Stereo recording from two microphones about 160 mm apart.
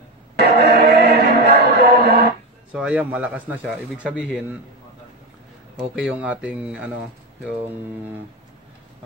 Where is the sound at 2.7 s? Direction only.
10° right (ahead or behind).